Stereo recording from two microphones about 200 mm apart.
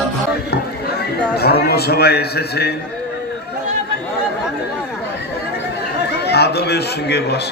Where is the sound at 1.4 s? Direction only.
55° left (ahead or behind).